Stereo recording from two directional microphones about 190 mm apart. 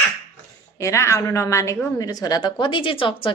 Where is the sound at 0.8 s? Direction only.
15° left (ahead or behind).